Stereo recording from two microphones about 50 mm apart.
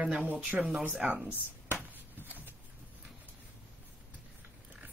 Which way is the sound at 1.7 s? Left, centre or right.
Right.